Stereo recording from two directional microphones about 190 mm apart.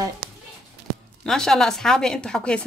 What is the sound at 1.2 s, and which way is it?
Speech, centre (ahead or behind).